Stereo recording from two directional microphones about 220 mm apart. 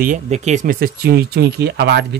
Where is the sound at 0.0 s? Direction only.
35° right (ahead or behind).